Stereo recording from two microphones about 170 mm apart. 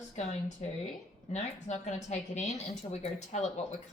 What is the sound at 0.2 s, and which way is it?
A woman's voice, 40° left (ahead or behind).